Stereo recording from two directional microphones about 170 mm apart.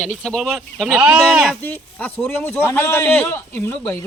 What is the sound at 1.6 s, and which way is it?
A man's voice, 10° left (ahead or behind).